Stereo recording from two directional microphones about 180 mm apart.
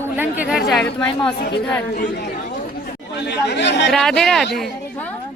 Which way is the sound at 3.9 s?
Centre (ahead or behind).